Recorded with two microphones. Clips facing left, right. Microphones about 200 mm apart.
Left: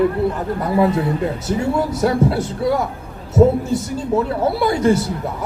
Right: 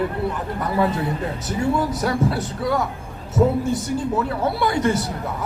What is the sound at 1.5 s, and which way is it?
A man's voice, 25° left (ahead or behind).